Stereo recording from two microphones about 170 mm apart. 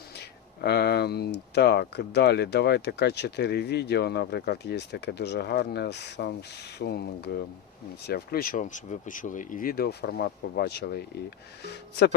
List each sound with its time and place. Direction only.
0.2 s speech: 75° left (ahead or behind)